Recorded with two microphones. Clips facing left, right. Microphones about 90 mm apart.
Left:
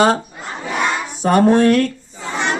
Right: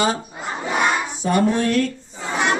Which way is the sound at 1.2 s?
60° left (ahead or behind).